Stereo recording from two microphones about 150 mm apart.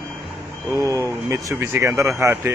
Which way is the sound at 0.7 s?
20° right (ahead or behind).